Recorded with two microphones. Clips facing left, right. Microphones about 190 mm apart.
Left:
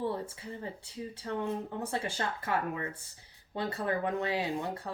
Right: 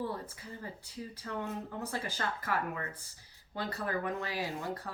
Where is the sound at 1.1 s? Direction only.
30° left (ahead or behind).